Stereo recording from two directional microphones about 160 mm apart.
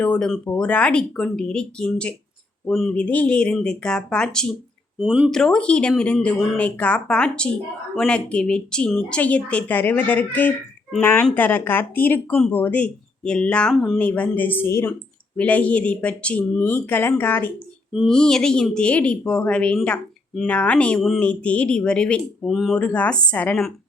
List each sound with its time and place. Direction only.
0.0 s speech: 5° left (ahead or behind)
4.9 s speech: 5° right (ahead or behind)